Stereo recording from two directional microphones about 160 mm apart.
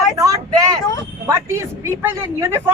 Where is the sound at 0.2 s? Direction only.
20° right (ahead or behind).